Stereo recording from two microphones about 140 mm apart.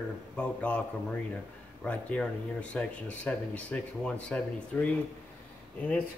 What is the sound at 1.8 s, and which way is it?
A man's voice, 5° left (ahead or behind).